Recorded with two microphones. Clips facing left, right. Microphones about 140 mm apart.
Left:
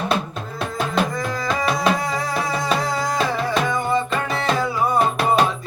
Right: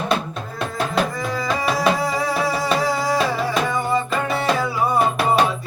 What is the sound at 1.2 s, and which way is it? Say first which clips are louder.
Music: even; 5° right (ahead or behind).